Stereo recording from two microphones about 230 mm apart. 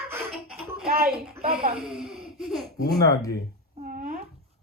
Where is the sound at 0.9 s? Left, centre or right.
Right.